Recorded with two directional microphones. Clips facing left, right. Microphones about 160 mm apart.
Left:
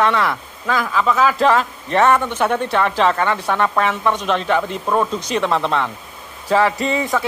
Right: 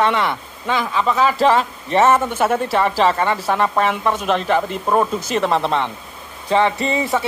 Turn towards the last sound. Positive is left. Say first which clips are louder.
# even
turn(degrees=0)  # may be behind; listen again after turning